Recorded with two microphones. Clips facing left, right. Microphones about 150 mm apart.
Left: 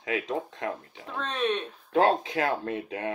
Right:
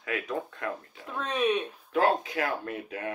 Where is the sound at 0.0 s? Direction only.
25° left (ahead or behind).